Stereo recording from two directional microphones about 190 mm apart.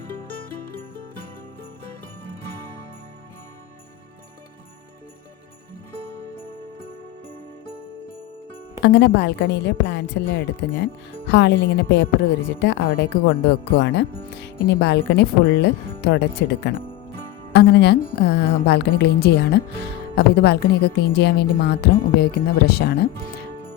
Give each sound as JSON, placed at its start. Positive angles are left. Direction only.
{"t": 0.6, "sound": "music", "side_deg": 50}
{"t": 8.8, "sound": "speech", "side_deg": 60}